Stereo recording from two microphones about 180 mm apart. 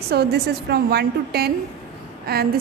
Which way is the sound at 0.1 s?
65° right (ahead or behind).